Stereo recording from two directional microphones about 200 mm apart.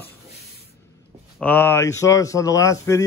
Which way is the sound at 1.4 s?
10° left (ahead or behind).